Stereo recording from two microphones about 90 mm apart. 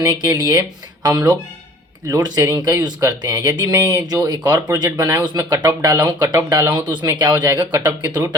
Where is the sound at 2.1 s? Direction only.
40° right (ahead or behind).